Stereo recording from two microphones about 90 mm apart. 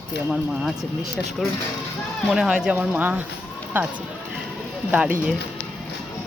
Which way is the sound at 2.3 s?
5° right (ahead or behind).